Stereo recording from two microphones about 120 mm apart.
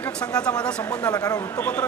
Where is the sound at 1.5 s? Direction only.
10° left (ahead or behind).